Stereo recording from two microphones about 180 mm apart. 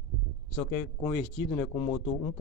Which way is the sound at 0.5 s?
20° left (ahead or behind).